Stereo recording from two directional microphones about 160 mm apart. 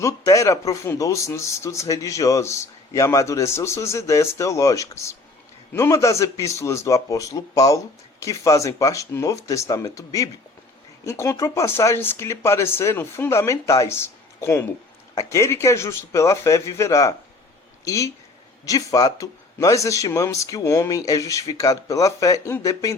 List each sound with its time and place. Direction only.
0.0 s speech: 20° left (ahead or behind)
15.1 s speech: 20° left (ahead or behind)